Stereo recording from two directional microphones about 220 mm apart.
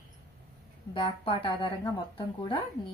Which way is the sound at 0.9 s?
25° left (ahead or behind).